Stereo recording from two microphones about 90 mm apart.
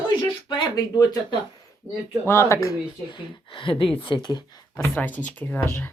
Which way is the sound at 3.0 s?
60° left (ahead or behind).